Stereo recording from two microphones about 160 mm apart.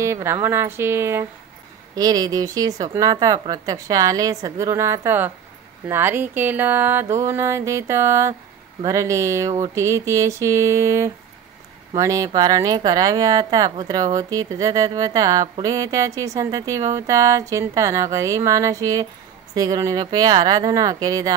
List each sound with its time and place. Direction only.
0.0 s mantra: 15° right (ahead or behind)
2.0 s speech: 25° right (ahead or behind)
5.9 s mantra: 15° right (ahead or behind)
8.8 s speech: 20° right (ahead or behind)